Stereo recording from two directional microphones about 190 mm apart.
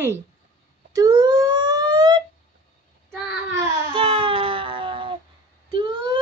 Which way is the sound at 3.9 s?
30° right (ahead or behind).